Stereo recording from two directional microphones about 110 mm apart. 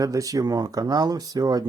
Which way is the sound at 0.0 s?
30° right (ahead or behind).